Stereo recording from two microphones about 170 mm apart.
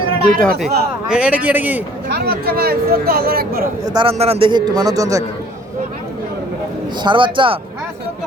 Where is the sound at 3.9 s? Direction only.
35° right (ahead or behind); by 5.2 s 20° right (ahead or behind).